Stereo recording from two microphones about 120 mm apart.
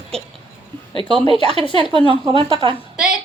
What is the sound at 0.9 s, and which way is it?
Speech, 45° right (ahead or behind).